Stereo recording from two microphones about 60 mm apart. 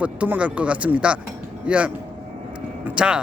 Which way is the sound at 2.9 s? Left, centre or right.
Centre.